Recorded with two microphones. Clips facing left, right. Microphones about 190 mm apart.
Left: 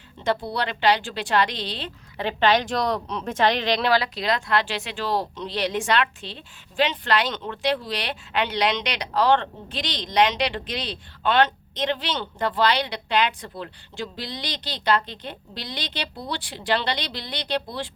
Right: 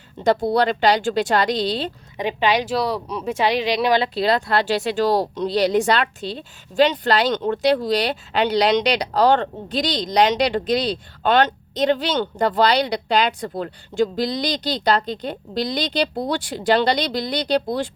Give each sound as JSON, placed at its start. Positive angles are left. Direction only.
{"t": 0.3, "sound": "speech", "side_deg": -45}
{"t": 2.1, "sound": "speech", "side_deg": -10}
{"t": 4.0, "sound": "speech", "side_deg": -35}